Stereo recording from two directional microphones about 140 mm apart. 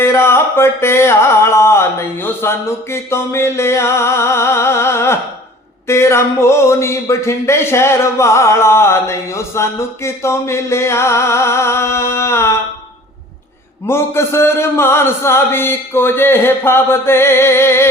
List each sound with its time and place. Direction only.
0.0 s speech: 15° left (ahead or behind)
13.8 s a man's voice: 15° left (ahead or behind)